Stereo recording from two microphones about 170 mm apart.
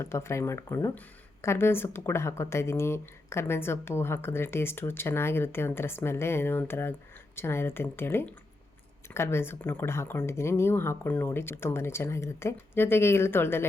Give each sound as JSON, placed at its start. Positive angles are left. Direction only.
{"t": 0.0, "sound": "speech", "side_deg": 15}